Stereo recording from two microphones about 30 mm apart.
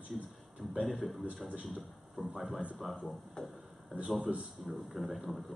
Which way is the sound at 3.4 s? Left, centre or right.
Left.